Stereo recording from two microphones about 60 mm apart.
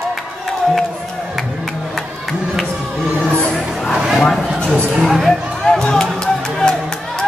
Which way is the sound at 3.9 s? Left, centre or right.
Centre.